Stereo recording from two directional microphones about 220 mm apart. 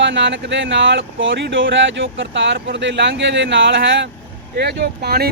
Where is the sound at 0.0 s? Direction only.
55° right (ahead or behind).